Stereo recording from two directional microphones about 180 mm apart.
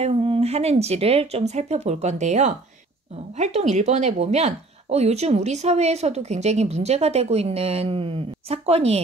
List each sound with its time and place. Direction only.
0.0 s speech: 35° right (ahead or behind)